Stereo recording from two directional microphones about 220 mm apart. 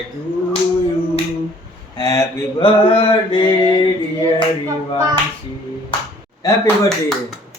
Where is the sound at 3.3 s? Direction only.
20° left (ahead or behind).